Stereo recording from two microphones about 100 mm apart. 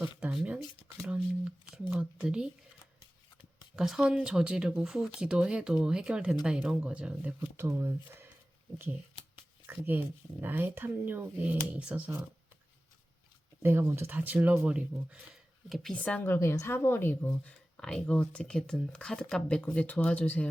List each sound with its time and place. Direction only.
0.2 s speech: 15° right (ahead or behind)
3.8 s speech: 5° right (ahead or behind); by 8.3 s 25° right (ahead or behind)
9.6 s speech: 20° right (ahead or behind)
13.6 s speech: 20° right (ahead or behind); by 16.0 s centre (ahead or behind)
16.0 s a woman's voice: 15° left (ahead or behind)
17.7 s speech: 10° left (ahead or behind)